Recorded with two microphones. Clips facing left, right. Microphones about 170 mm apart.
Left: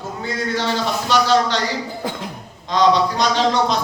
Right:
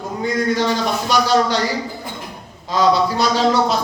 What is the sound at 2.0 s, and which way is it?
Cough, 90° left.